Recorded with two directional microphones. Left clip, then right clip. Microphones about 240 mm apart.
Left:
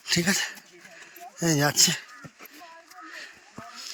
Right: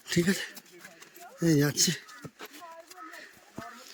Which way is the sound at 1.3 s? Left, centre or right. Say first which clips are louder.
Left 3 dB; centre.